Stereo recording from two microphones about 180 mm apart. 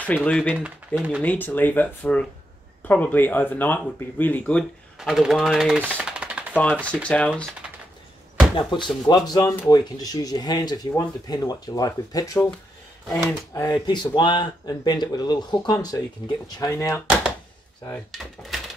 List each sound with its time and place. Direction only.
0.0 s speech: 10° left (ahead or behind)
0.7 s speech: 5° right (ahead or behind)
1.2 s speech: 10° left (ahead or behind); by 6.4 s 5° right (ahead or behind)
6.8 s speech: 5° left (ahead or behind)
8.5 s speech: 25° left (ahead or behind)
13.6 s speech: 25° left (ahead or behind)